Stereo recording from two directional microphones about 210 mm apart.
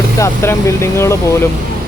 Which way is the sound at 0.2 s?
15° left (ahead or behind).